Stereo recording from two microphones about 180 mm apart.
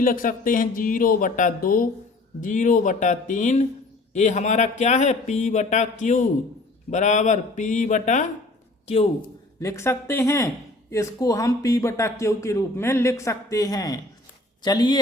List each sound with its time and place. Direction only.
0.0 s a man's voice: 50° left (ahead or behind)
9.6 s speech: 15° left (ahead or behind)